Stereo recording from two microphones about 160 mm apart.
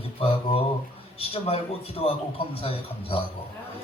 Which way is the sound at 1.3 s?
35° left (ahead or behind).